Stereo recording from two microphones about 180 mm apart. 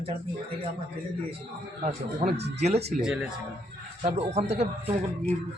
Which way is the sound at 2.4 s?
70° right (ahead or behind).